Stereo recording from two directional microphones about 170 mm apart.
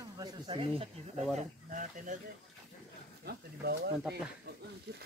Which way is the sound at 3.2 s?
70° right (ahead or behind).